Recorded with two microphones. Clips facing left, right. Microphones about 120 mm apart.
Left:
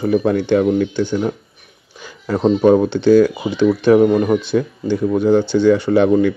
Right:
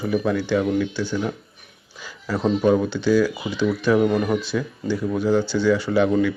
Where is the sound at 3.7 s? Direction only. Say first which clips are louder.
Left 7 dB; 30° left (ahead or behind).